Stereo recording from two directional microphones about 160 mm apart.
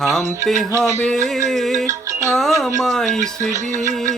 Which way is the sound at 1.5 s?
Centre (ahead or behind).